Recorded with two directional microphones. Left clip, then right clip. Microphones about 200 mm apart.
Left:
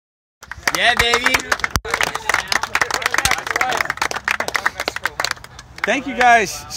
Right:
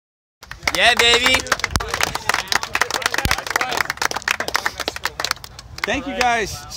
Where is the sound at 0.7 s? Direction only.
15° right (ahead or behind).